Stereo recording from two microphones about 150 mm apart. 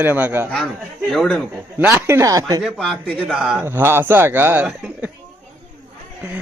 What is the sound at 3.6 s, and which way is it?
A man's voice, 15° right (ahead or behind).